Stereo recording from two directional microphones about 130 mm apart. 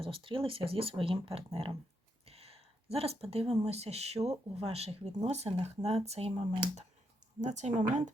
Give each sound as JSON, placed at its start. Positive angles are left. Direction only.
{"t": 0.0, "sound": "speech", "side_deg": -45}
{"t": 7.4, "sound": "speech", "side_deg": -65}